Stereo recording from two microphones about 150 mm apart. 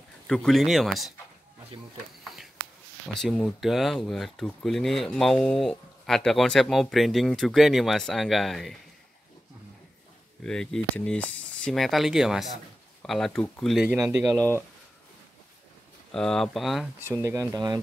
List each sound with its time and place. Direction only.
0.3 s speech: 5° left (ahead or behind)
3.2 s speech: 5° left (ahead or behind)
10.4 s speech: 5° left (ahead or behind)
16.1 s speech: 5° left (ahead or behind)
17.2 s speech: 15° right (ahead or behind)